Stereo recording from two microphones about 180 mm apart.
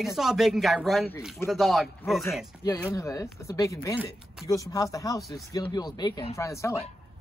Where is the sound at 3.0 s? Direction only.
20° left (ahead or behind).